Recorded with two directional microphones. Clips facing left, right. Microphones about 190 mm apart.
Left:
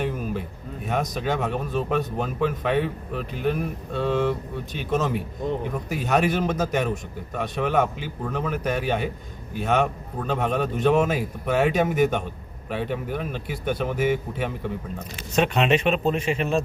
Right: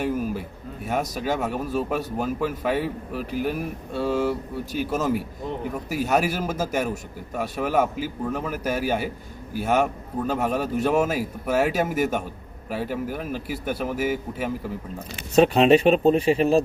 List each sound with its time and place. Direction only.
0.0 s a sound: 5° right (ahead or behind)
0.9 s a man's voice: 5° right (ahead or behind)
15.4 s speech: 35° right (ahead or behind)